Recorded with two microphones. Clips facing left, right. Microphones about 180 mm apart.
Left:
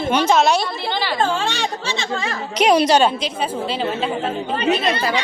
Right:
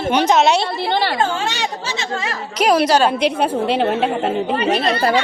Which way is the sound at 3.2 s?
65° right (ahead or behind).